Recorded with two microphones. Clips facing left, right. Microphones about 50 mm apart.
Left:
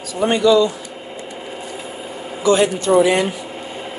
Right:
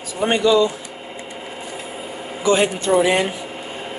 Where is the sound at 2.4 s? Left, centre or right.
Right.